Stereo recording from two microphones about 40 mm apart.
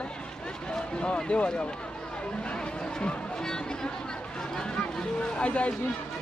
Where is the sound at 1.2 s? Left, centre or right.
Left.